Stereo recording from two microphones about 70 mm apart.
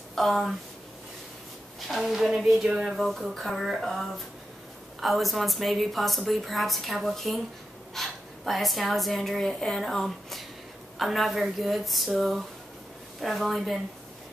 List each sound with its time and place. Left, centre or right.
0.1 s speech: centre
1.9 s a woman's voice: centre